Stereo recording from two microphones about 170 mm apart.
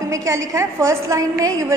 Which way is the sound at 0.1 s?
20° right (ahead or behind).